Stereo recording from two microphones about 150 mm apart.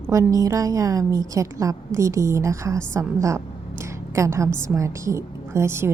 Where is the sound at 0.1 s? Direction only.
20° right (ahead or behind).